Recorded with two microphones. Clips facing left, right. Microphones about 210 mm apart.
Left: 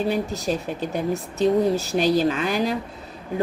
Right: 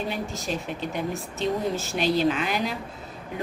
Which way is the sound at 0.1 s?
40° left (ahead or behind).